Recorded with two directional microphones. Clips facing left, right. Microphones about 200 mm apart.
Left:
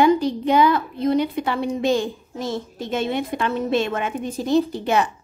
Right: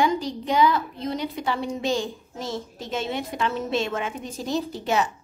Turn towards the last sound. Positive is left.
turn(degrees=55)  # may be behind; listen again after turning